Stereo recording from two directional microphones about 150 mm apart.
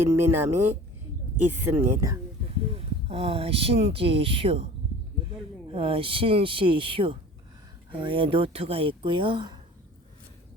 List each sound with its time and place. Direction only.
0.0 s speech: 15° right (ahead or behind)
2.7 s speech: 40° right (ahead or behind)